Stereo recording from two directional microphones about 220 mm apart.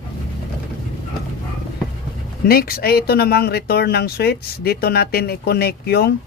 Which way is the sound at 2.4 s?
45° left (ahead or behind).